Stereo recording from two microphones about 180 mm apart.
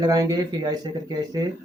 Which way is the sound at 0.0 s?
20° right (ahead or behind).